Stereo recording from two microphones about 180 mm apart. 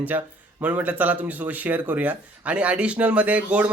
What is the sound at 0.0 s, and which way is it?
Speech, 10° right (ahead or behind).